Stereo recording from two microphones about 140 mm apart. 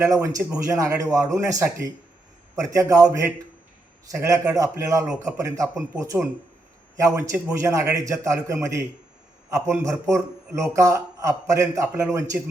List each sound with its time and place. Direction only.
0.0 s a man's voice: 20° right (ahead or behind)